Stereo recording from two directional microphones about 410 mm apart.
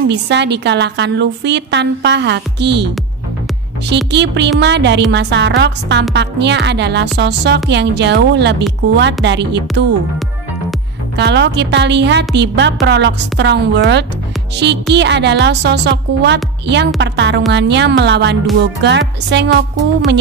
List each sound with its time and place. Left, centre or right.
0.1 s a woman's voice: right
3.9 s a woman's voice: right
11.1 s a woman's voice: right